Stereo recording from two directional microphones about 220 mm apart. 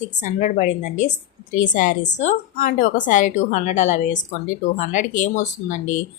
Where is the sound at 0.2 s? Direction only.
35° left (ahead or behind).